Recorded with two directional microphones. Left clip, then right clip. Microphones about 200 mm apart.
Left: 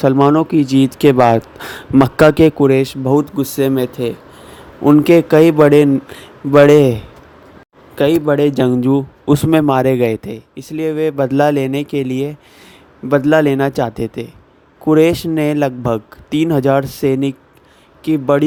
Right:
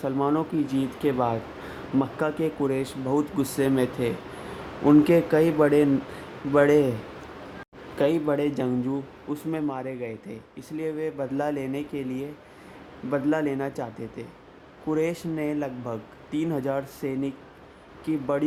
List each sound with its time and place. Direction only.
0.0 s a man's voice: 45° left (ahead or behind)
7.9 s speech: 40° left (ahead or behind)